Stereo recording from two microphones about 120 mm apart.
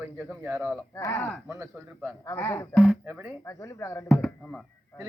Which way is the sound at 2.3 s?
20° left (ahead or behind).